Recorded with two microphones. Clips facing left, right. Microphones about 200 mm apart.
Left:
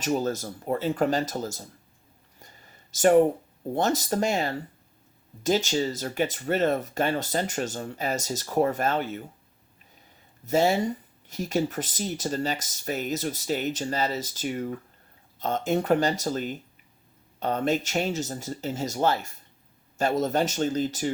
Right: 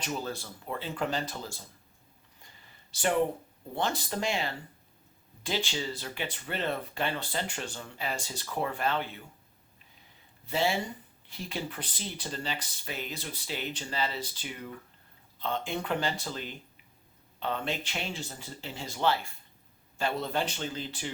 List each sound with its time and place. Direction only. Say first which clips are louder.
0.0 s speech: left 9 dB; 45° left (ahead or behind)
2.4 s a sound: left 6 dB; 45° left (ahead or behind)
3.8 s speech: left 7 dB; 45° left (ahead or behind)
10.4 s speech: left 7 dB; 45° left (ahead or behind)